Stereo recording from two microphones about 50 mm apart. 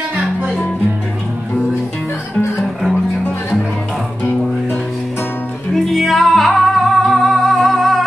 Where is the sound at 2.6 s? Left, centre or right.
Centre.